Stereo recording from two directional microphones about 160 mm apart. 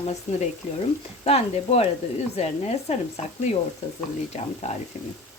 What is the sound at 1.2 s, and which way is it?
A woman's voice, 40° left (ahead or behind).